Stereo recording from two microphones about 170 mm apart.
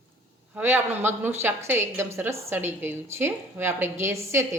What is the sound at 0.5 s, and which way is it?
A woman's voice, 10° right (ahead or behind).